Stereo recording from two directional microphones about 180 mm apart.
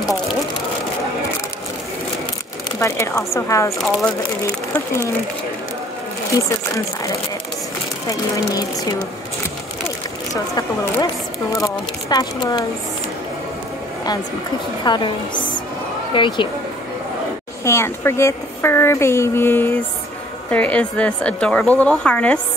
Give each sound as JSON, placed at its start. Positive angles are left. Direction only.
{"t": 2.8, "sound": "speech", "side_deg": 15}
{"t": 3.7, "sound": "a woman's voice", "side_deg": 0}
{"t": 10.3, "sound": "speech", "side_deg": 20}
{"t": 14.9, "sound": "speech", "side_deg": 25}
{"t": 17.6, "sound": "a woman's voice", "side_deg": 15}